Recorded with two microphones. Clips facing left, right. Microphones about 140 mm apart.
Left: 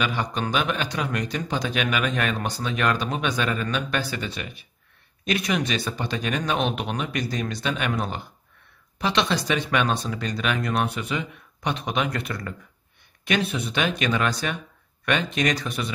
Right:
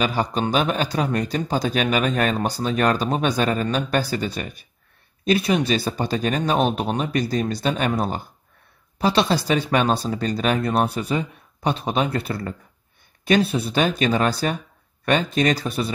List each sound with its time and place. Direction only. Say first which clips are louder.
0.0 s speech: right 4 dB; 35° right (ahead or behind)